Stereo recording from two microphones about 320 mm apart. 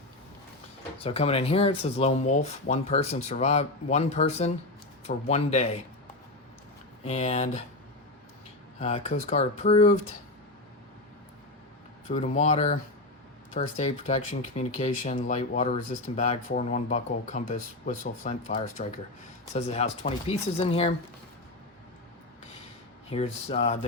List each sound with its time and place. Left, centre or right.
0.9 s speech: centre
7.0 s speech: centre
8.8 s speech: centre
12.0 s speech: centre
23.0 s speech: centre